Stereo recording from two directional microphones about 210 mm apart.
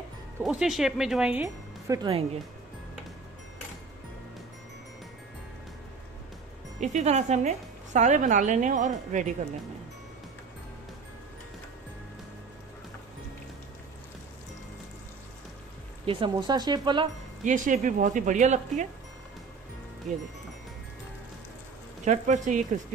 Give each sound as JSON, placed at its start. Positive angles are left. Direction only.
{"t": 0.4, "sound": "speech", "side_deg": 0}
{"t": 2.0, "sound": "speech", "side_deg": -25}
{"t": 6.8, "sound": "a woman's voice", "side_deg": -35}
{"t": 16.1, "sound": "speech", "side_deg": -25}
{"t": 17.5, "sound": "a woman's voice", "side_deg": -40}
{"t": 22.0, "sound": "a woman's voice", "side_deg": -35}